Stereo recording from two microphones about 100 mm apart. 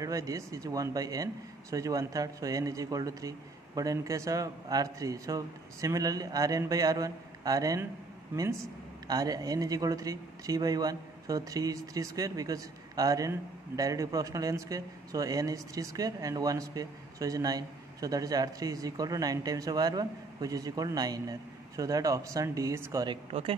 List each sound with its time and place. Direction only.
0.0 s speech: 35° right (ahead or behind)
9.0 s speech: 40° right (ahead or behind)